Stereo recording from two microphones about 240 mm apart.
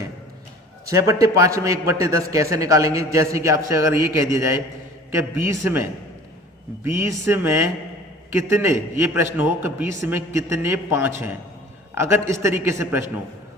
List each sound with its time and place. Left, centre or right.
0.9 s a man's voice: centre
6.8 s a man's voice: centre